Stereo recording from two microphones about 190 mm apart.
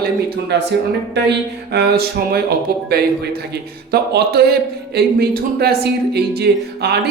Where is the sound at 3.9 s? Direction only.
55° right (ahead or behind).